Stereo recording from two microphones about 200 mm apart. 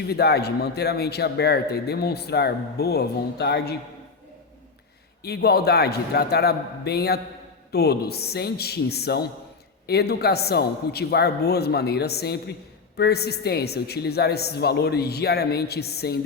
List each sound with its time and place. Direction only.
0.1 s speech: 55° left (ahead or behind)
5.2 s speech: 55° left (ahead or behind)